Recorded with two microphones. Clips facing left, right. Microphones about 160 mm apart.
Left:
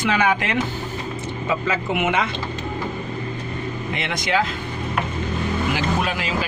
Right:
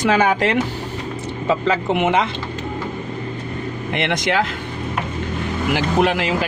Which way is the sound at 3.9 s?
65° right (ahead or behind).